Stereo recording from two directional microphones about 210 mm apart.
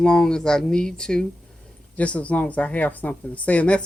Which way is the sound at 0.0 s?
5° left (ahead or behind).